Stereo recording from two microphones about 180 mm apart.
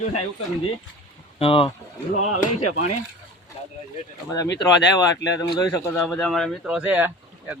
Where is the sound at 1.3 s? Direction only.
30° left (ahead or behind).